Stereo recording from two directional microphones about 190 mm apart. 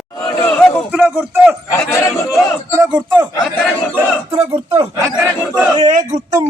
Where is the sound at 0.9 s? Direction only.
5° right (ahead or behind).